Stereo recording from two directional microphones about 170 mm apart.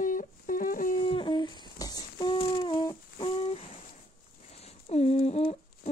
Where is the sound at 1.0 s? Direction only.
30° left (ahead or behind).